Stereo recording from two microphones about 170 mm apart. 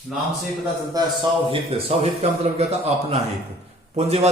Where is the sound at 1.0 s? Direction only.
20° right (ahead or behind).